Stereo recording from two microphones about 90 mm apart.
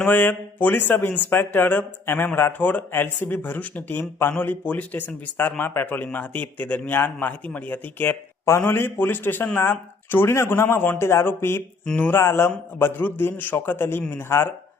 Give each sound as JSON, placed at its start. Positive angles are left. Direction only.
{"t": 0.1, "sound": "a man's voice", "side_deg": 20}
{"t": 12.2, "sound": "a man's voice", "side_deg": 30}